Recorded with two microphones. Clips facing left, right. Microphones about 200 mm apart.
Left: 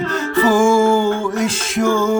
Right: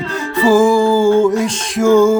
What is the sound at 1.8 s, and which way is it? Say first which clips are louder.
Speech: right 7 dB; 10° right (ahead or behind).